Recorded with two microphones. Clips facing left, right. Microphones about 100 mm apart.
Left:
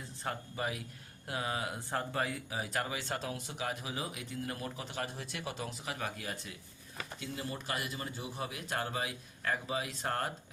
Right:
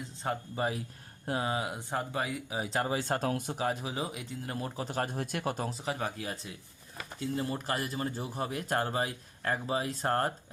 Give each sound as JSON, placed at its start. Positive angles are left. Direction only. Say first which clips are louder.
{"t": 0.2, "sound": "speech", "louder": "right 5 dB", "side_deg": -25}
{"t": 3.6, "sound": "speech", "louder": "right 2 dB", "side_deg": -30}